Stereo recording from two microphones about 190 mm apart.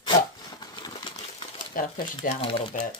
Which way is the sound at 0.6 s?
20° left (ahead or behind).